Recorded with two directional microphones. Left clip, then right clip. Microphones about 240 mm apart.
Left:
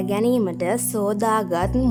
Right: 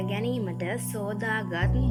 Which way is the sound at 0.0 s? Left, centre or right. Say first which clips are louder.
Left 10 dB; left.